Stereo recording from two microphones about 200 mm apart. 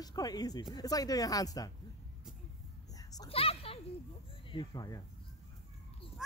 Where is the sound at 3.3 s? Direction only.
30° left (ahead or behind).